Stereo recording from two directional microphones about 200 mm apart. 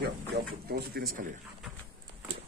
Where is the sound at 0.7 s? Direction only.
50° right (ahead or behind).